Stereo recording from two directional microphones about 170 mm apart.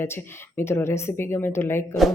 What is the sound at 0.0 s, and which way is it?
A woman's voice, 15° left (ahead or behind).